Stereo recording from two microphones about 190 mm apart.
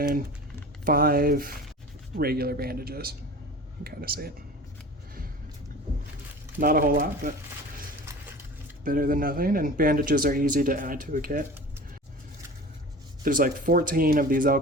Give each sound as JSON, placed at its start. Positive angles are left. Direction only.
{"t": 0.9, "sound": "speech", "side_deg": -50}
{"t": 6.6, "sound": "speech", "side_deg": -50}
{"t": 8.8, "sound": "speech", "side_deg": -50}
{"t": 13.2, "sound": "speech", "side_deg": -45}